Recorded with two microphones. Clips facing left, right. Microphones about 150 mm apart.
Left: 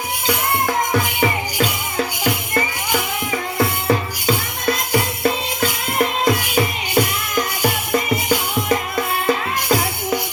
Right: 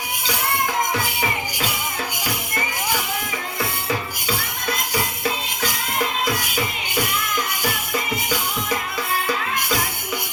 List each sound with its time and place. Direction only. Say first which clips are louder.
4.6 s music: left 7 dB; 50° left (ahead or behind)